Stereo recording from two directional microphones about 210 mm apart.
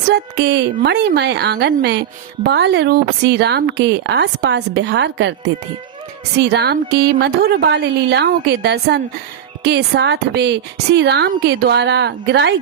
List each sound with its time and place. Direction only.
0.1 s speech: 55° right (ahead or behind)
6.5 s speech: 50° right (ahead or behind)